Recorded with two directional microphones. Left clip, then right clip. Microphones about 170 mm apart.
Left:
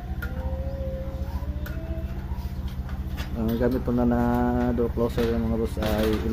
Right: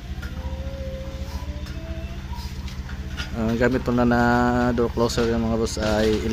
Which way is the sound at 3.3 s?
20° right (ahead or behind).